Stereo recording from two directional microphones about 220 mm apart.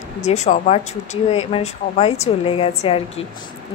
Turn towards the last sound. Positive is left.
turn(degrees=25)  # may be behind; listen again after turning